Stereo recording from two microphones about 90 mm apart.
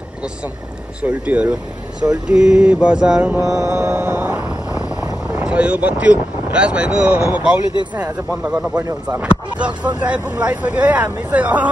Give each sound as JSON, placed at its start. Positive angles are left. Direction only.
{"t": 1.0, "sound": "speech", "side_deg": -15}
{"t": 3.6, "sound": "music", "side_deg": -30}
{"t": 5.3, "sound": "speech", "side_deg": -10}
{"t": 9.9, "sound": "speech", "side_deg": -15}